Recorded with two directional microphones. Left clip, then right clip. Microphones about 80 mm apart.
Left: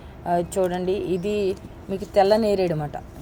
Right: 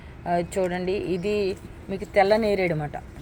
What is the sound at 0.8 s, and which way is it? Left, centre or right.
Music, right.